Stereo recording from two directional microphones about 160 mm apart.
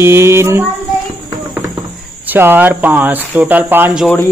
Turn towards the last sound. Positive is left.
turn(degrees=-10)  # may be behind; listen again after turning